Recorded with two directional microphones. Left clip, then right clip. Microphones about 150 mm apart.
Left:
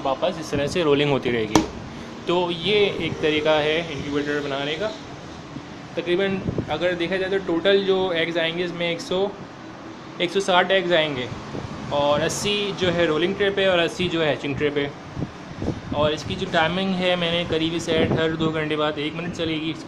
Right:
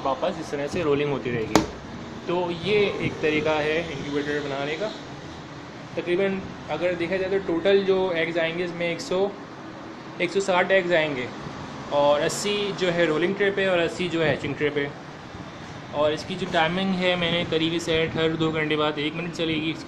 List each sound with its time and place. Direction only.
0.0 s speech: 10° left (ahead or behind)
0.7 s speech: 30° left (ahead or behind)
2.2 s speech: 25° left (ahead or behind)
2.5 s speech: 10° left (ahead or behind)
5.9 s speech: 10° left (ahead or behind)
16.0 s speech: 5° left (ahead or behind)